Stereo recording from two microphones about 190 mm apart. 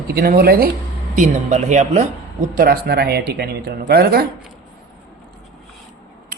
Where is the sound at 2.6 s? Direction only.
50° right (ahead or behind).